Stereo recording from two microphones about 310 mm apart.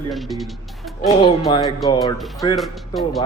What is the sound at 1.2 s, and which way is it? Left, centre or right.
A man's voice, centre.